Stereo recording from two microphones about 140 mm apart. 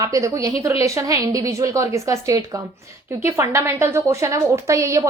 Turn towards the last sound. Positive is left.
turn(degrees=-25)  # may be behind; listen again after turning